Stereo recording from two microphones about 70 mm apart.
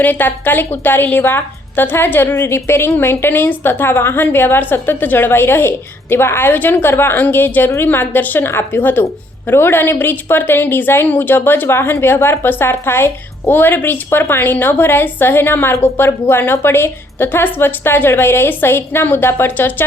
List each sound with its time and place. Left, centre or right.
0.0 s a woman's voice: left